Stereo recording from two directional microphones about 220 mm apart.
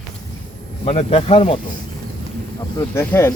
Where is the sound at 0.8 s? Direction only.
25° left (ahead or behind).